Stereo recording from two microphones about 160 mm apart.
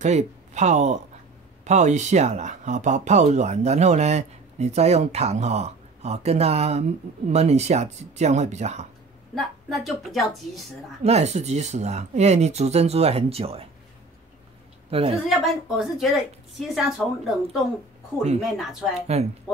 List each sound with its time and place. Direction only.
0.0 s speech: 45° right (ahead or behind)
9.3 s a woman's voice: centre (ahead or behind)
11.1 s speech: 45° right (ahead or behind)
14.9 s a woman's voice: 40° right (ahead or behind)
15.2 s a woman's voice: centre (ahead or behind)
18.6 s a woman's voice: centre (ahead or behind)
19.1 s speech: 40° right (ahead or behind)